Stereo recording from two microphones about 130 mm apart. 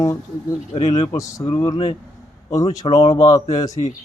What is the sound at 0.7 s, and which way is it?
Speech, 55° left (ahead or behind).